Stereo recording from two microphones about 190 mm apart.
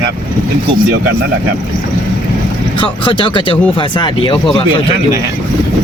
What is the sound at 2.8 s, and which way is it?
Speech, 25° left (ahead or behind).